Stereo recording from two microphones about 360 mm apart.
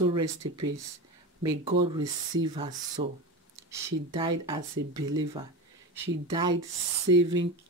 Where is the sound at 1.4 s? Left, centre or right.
Centre.